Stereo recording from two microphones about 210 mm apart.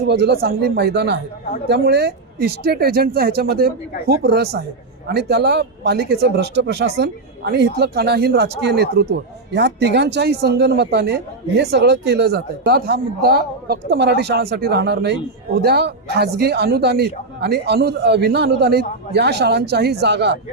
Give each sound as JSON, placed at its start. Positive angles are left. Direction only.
{"t": 0.1, "sound": "a man's voice", "side_deg": -50}